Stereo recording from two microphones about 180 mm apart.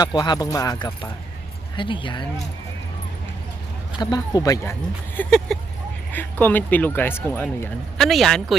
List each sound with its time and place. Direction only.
0.0 s speech: 25° left (ahead or behind)
3.9 s speech: 20° left (ahead or behind)
5.1 s speech: 5° left (ahead or behind)